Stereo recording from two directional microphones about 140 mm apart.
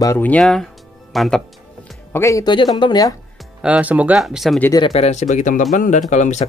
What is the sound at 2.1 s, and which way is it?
Speech, 20° left (ahead or behind).